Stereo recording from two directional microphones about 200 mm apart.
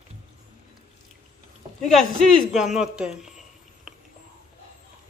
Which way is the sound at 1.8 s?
Centre (ahead or behind).